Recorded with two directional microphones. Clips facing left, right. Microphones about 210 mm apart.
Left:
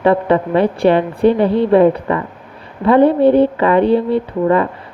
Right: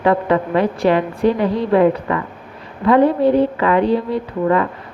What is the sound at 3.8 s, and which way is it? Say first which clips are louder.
Speech: left 4 dB; 60° left (ahead or behind).